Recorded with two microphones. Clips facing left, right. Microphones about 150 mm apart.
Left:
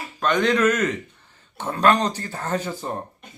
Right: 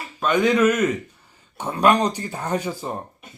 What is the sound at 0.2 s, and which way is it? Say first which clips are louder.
Speech: right 2 dB; 5° right (ahead or behind).